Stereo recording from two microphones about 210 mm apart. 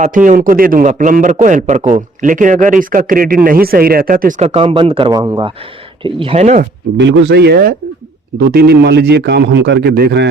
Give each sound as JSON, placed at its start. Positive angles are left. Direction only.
{"t": 0.0, "sound": "a man's voice", "side_deg": -40}
{"t": 6.9, "sound": "a man's voice", "side_deg": -55}